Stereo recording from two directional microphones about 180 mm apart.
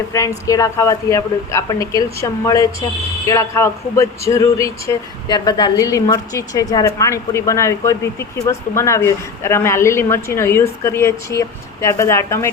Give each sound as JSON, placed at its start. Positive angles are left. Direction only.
{"t": 0.1, "sound": "a woman's voice", "side_deg": 20}